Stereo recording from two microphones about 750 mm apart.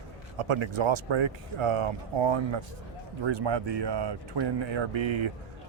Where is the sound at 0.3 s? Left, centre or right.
Right.